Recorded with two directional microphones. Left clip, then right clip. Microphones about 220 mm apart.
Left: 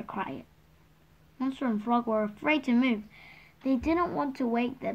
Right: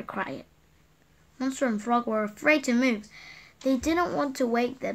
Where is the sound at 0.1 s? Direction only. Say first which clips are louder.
Right 3 dB; 25° right (ahead or behind).